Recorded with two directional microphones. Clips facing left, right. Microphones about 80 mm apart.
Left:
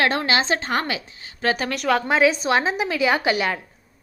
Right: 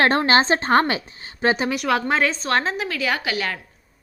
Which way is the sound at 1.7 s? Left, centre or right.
Centre.